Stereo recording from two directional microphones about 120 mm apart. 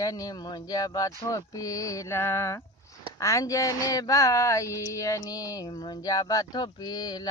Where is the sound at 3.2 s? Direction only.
25° left (ahead or behind).